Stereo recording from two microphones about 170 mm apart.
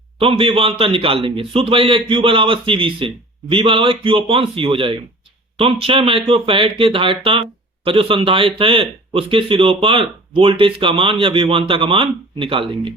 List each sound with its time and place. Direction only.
0.2 s speech: 35° right (ahead or behind)